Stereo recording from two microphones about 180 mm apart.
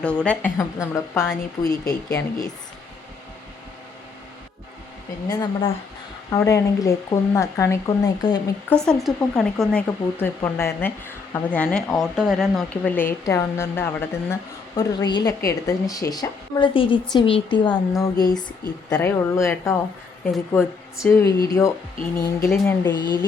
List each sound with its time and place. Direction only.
0.0 s speech: 5° left (ahead or behind)
5.3 s speech: 25° left (ahead or behind)
8.7 s speech: 5° left (ahead or behind)
11.9 s speech: 5° right (ahead or behind)
13.0 s speech: 15° left (ahead or behind)